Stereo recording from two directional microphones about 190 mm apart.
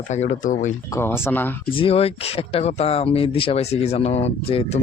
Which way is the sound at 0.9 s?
10° left (ahead or behind).